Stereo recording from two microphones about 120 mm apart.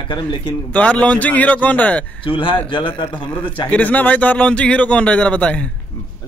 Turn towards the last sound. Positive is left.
turn(degrees=10)  # may be behind; listen again after turning